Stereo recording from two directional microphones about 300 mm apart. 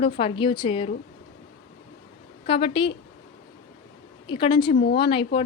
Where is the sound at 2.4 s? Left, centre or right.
Centre.